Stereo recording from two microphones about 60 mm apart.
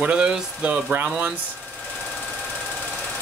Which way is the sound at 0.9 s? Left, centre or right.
Right.